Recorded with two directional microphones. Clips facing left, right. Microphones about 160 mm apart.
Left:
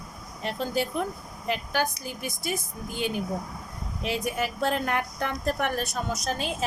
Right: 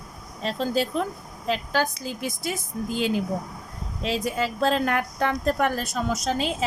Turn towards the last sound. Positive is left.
turn(degrees=-90)